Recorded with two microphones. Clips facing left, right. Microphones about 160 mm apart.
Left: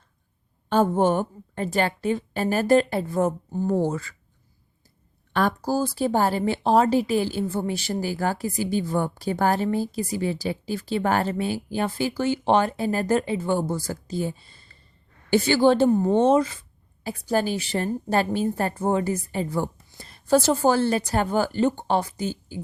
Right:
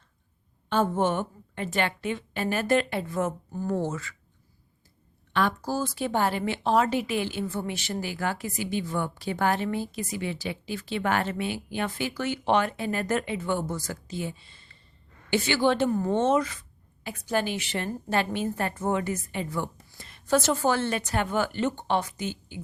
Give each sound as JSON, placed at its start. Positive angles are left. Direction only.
{"t": 0.7, "sound": "a woman's voice", "side_deg": 40}
{"t": 5.3, "sound": "a woman's voice", "side_deg": 40}